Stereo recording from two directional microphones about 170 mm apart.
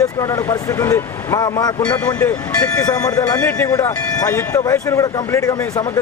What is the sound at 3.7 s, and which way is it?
Speech, 20° left (ahead or behind).